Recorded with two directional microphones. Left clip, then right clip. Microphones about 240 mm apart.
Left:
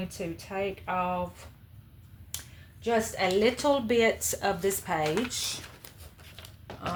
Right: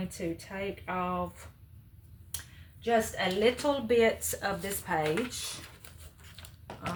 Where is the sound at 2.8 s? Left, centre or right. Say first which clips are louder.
Left 1 dB; left.